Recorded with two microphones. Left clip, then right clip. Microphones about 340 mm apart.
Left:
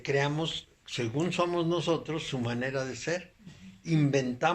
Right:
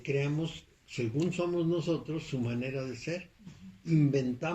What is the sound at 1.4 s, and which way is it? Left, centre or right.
Speech, left.